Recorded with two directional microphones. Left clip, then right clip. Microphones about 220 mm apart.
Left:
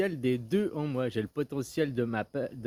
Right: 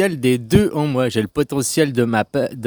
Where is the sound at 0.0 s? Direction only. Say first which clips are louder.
Right 12 dB; 50° right (ahead or behind).